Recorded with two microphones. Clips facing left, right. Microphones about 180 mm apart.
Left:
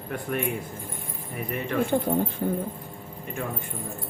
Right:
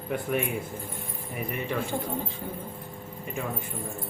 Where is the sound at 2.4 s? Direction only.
55° left (ahead or behind).